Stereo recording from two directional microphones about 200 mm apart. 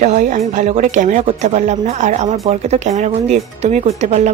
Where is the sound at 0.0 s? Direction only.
35° right (ahead or behind).